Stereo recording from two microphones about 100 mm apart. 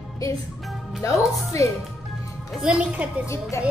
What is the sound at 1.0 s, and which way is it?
Speech, 30° left (ahead or behind).